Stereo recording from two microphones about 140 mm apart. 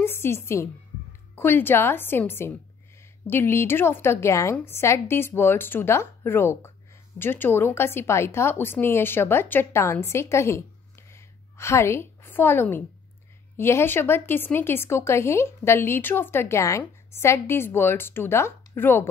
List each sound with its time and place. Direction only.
0.0 s a woman's voice: 15° left (ahead or behind)